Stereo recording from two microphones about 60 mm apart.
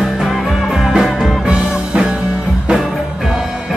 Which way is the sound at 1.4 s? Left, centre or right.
Centre.